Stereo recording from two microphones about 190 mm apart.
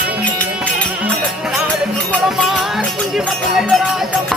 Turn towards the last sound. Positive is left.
turn(degrees=0)  # may be behind; listen again after turning